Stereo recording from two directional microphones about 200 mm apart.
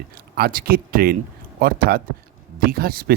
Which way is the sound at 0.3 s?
50° right (ahead or behind).